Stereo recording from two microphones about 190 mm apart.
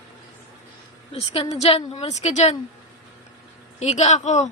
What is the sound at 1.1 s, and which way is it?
A woman's voice, 30° left (ahead or behind).